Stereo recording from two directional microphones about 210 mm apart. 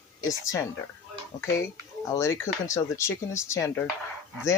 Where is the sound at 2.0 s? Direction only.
15° left (ahead or behind).